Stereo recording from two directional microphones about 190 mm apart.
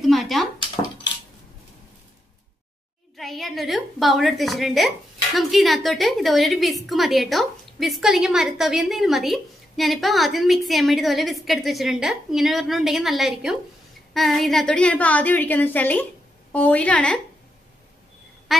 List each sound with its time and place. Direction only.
0.0 s dishes: centre (ahead or behind)
3.2 s a woman's voice: centre (ahead or behind)
18.5 s a sound: centre (ahead or behind)